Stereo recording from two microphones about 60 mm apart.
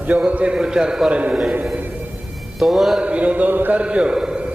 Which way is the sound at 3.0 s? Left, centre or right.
Right.